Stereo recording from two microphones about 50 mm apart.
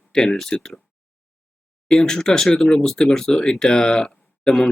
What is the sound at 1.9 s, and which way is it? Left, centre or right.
Speech, centre.